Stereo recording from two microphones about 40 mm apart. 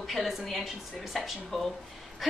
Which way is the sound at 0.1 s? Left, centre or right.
Centre.